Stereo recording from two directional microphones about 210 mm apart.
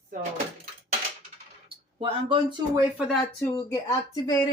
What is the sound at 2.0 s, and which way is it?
Speech, 25° right (ahead or behind).